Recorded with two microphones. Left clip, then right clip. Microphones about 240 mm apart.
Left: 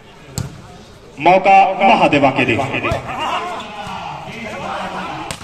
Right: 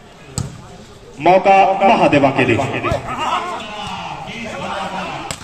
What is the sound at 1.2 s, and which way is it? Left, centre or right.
A man's voice, left.